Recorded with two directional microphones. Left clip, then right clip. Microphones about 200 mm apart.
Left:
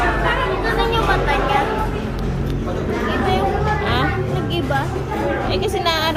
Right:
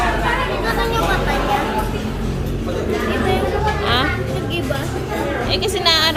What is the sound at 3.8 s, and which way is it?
Music, centre (ahead or behind).